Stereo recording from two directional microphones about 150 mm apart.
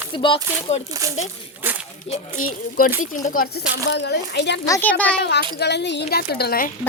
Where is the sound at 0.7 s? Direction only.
45° left (ahead or behind).